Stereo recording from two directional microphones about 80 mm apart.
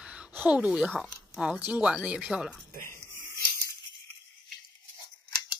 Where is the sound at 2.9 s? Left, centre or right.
Right.